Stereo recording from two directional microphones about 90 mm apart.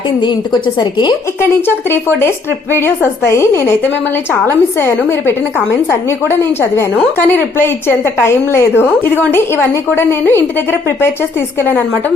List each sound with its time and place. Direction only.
0.8 s a woman's voice: 60° left (ahead or behind)
1.4 s a woman's voice: 25° left (ahead or behind)
4.8 s a woman's voice: 25° left (ahead or behind)